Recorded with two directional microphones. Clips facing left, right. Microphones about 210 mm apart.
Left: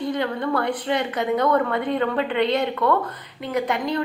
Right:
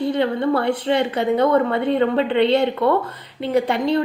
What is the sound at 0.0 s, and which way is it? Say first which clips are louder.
A woman's voice: right 5 dB; 30° right (ahead or behind).